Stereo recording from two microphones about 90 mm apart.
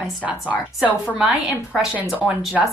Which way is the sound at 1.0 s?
15° right (ahead or behind).